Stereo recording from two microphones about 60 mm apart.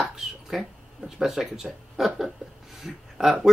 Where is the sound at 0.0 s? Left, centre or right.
Centre.